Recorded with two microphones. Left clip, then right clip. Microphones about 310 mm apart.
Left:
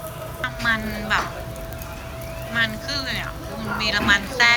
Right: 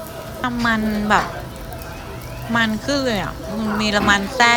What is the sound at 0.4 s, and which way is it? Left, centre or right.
Speech, centre.